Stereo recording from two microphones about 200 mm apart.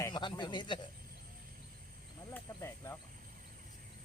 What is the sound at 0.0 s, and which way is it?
Speech, 20° left (ahead or behind).